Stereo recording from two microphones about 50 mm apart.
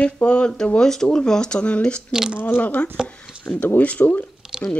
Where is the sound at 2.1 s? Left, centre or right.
Centre.